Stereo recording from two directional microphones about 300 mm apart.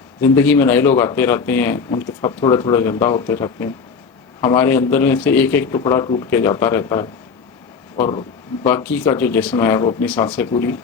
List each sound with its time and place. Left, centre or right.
0.2 s speech: centre